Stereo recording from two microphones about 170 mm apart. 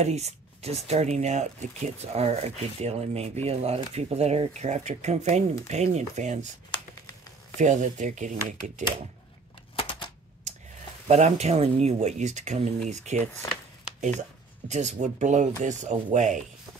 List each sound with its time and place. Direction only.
0.0 s speech: 40° right (ahead or behind)
7.5 s speech: 45° right (ahead or behind)
9.8 s typewriter: 30° left (ahead or behind)
10.5 s a sound: 45° right (ahead or behind)
11.1 s speech: 40° right (ahead or behind)
14.7 s speech: 45° right (ahead or behind)